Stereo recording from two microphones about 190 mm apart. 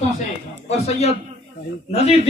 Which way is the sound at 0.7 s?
35° left (ahead or behind).